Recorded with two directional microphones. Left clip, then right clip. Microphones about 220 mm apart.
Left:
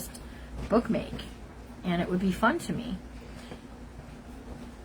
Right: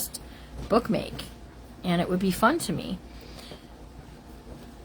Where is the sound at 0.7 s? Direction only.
50° right (ahead or behind).